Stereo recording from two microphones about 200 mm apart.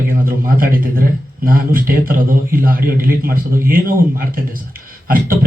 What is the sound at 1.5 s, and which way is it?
A man's voice, 45° right (ahead or behind).